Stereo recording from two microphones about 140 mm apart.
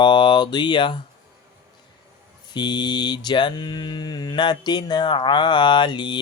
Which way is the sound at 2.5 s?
30° left (ahead or behind).